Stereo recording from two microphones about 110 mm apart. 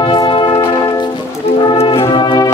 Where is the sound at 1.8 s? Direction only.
45° left (ahead or behind).